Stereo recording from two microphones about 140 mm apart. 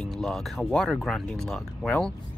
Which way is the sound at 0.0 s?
5° left (ahead or behind).